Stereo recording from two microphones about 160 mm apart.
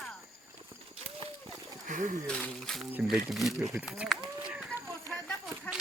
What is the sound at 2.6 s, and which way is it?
Speech, centre (ahead or behind).